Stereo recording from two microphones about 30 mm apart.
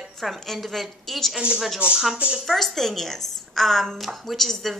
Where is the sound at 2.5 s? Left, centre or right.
Centre.